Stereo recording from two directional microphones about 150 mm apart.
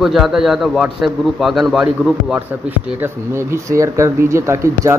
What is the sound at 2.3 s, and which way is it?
Speech, 15° right (ahead or behind).